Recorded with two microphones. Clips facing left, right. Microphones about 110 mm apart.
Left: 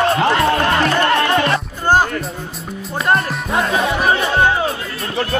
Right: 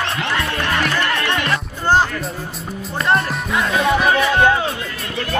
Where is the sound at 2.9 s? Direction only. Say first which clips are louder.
Left 1 dB; centre (ahead or behind).